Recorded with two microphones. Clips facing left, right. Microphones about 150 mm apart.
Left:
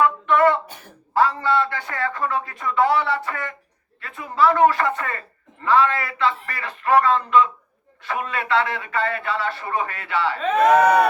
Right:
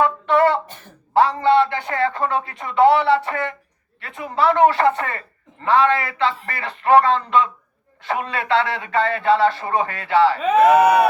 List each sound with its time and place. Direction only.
0.0 s a sound: 30° right (ahead or behind)
1.1 s a man's voice: 25° right (ahead or behind)
10.4 s speech: 10° right (ahead or behind)